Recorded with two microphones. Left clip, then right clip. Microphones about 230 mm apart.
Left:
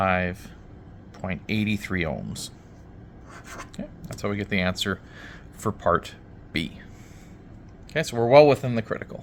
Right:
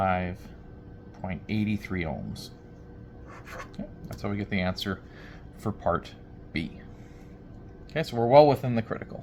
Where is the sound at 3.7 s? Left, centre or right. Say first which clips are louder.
Left 3 dB; left.